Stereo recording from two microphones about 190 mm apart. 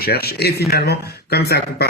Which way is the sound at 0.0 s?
55° left (ahead or behind).